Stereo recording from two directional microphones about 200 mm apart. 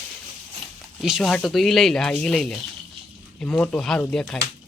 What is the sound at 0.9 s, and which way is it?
Speech, centre (ahead or behind).